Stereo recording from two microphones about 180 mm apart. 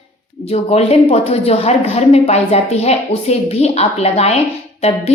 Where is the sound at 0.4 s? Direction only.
35° left (ahead or behind).